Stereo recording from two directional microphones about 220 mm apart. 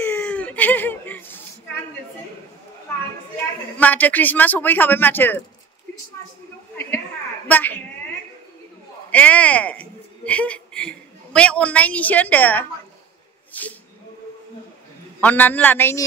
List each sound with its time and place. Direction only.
0.0 s whimper: 5° left (ahead or behind)
3.7 s a man's voice: 5° left (ahead or behind)
7.4 s a man's voice: 5° left (ahead or behind)
9.1 s speech: 5° left (ahead or behind)
15.1 s a man's voice: 5° left (ahead or behind)